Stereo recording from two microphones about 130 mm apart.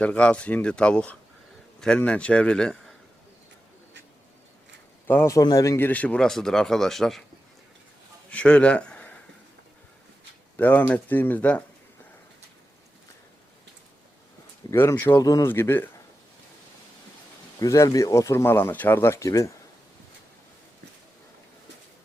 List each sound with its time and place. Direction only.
0.0 s a man's voice: 10° left (ahead or behind)
5.0 s a man's voice: 20° left (ahead or behind); by 7.3 s 5° left (ahead or behind)
8.3 s a man's voice: 10° left (ahead or behind)
10.6 s a man's voice: 10° left (ahead or behind)
14.7 s a man's voice: 20° left (ahead or behind)
17.6 s speech: 25° left (ahead or behind)